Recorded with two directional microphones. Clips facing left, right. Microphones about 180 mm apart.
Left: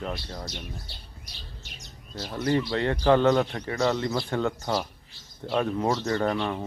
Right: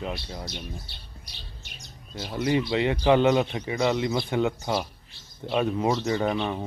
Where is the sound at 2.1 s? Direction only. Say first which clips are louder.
Right 1 dB; 15° right (ahead or behind).